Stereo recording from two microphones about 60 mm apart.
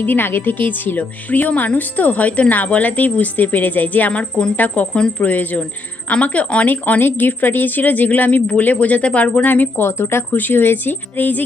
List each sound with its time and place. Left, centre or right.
0.0 s a woman's voice: left